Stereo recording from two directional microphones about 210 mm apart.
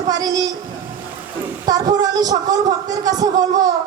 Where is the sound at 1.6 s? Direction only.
15° right (ahead or behind).